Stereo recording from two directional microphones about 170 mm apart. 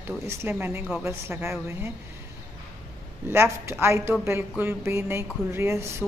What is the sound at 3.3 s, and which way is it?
A woman's voice, 15° right (ahead or behind).